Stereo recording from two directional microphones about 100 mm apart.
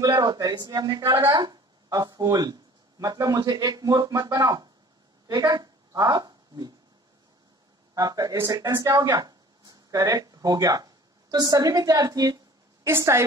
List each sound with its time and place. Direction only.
0.1 s a woman's voice: 45° right (ahead or behind)
7.9 s speech: 35° right (ahead or behind)
12.8 s a woman's voice: 25° right (ahead or behind)